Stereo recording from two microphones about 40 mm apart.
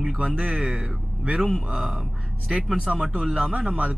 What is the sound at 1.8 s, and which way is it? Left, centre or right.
Speech, centre.